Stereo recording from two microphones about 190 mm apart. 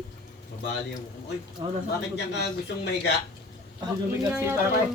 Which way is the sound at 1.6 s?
20° right (ahead or behind).